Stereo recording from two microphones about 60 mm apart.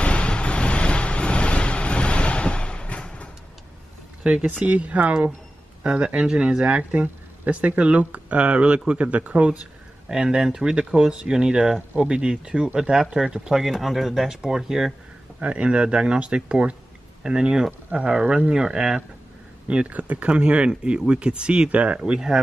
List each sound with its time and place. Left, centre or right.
0.0 s vehicle: centre
4.2 s speech: right
15.4 s speech: right